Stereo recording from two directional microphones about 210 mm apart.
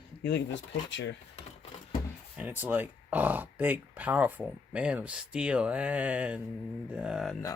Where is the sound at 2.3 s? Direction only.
10° right (ahead or behind).